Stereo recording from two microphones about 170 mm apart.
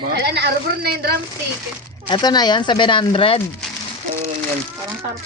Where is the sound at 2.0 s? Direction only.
25° left (ahead or behind).